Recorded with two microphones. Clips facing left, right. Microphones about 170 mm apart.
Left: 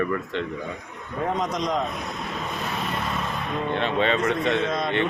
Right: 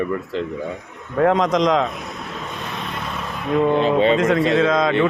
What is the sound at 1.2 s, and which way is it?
Speech, 90° right.